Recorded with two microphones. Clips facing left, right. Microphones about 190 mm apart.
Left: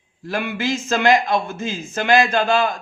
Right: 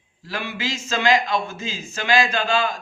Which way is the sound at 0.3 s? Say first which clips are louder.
Left 6 dB; 55° left (ahead or behind).